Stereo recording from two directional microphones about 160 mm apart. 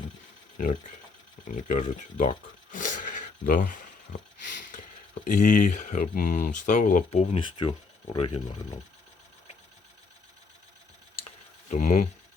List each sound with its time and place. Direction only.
1.5 s speech: 50° left (ahead or behind)
2.7 s a sound: 55° left (ahead or behind)
5.2 s speech: 55° left (ahead or behind)
7.1 s speech: 40° left (ahead or behind)
11.7 s speech: 50° left (ahead or behind)